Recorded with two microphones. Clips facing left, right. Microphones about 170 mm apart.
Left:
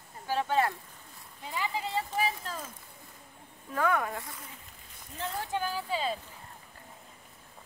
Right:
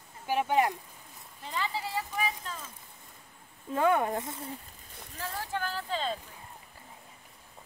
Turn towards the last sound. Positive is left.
turn(degrees=10)  # may be behind; listen again after turning